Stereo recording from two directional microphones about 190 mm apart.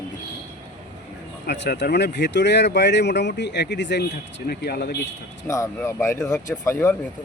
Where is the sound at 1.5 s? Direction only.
65° left (ahead or behind).